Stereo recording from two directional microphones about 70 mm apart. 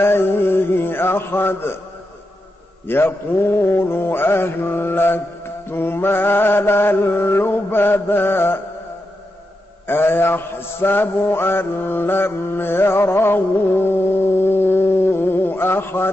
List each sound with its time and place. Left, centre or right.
0.0 s a man's voice: left
2.9 s mantra: left
9.8 s mantra: left